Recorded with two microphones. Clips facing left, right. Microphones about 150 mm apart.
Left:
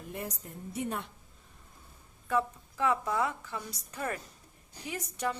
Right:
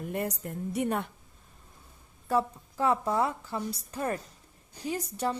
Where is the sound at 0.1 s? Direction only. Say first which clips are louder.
Right 6 dB; 70° right (ahead or behind).